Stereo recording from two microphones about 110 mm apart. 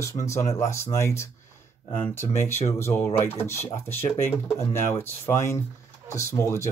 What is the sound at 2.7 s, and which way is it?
Speech, 25° left (ahead or behind).